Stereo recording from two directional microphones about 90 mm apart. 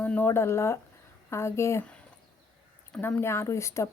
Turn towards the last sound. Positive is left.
turn(degrees=30)  # may be behind; listen again after turning